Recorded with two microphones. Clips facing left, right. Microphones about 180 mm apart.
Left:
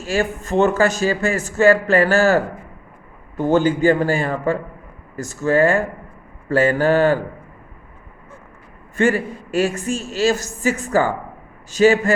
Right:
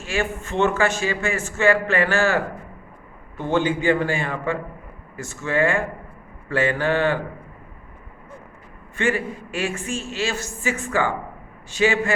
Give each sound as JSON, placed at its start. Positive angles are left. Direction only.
{"t": 0.0, "sound": "a man's voice", "side_deg": 40}
{"t": 9.0, "sound": "a man's voice", "side_deg": 40}